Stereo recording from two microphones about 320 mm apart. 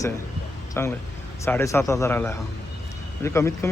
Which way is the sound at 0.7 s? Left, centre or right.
Centre.